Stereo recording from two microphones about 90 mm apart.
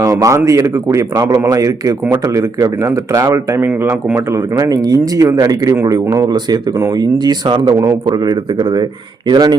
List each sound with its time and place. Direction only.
0.0 s speech: 40° right (ahead or behind)
1.2 s speech: 30° right (ahead or behind)
1.5 s speech: 40° right (ahead or behind); by 4.4 s 25° right (ahead or behind)
4.5 s speech: 40° right (ahead or behind)